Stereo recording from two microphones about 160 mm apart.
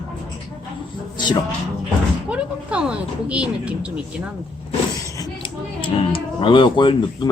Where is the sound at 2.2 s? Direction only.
5° right (ahead or behind).